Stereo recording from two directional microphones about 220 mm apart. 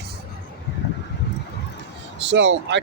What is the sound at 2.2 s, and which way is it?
Speech, 55° right (ahead or behind).